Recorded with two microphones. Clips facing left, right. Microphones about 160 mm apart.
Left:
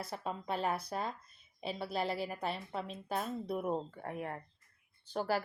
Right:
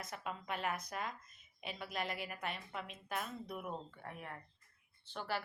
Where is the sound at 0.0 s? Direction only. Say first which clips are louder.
Left 5 dB; 30° left (ahead or behind).